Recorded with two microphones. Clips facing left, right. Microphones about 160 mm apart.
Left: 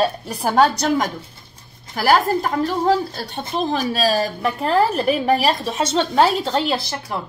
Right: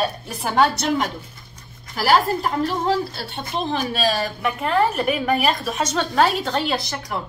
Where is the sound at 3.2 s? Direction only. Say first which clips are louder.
Left 3 dB; 40° left (ahead or behind).